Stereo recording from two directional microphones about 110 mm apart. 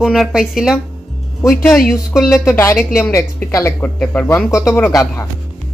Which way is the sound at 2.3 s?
20° left (ahead or behind).